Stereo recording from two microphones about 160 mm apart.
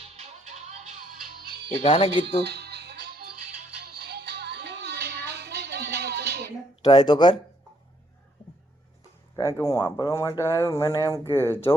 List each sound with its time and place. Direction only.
0.2 s music: 45° right (ahead or behind)
1.2 s music: 65° right (ahead or behind)
1.8 s speech: 35° left (ahead or behind)
2.2 s music: 90° right
6.8 s speech: 25° left (ahead or behind)
9.3 s speech: 20° left (ahead or behind)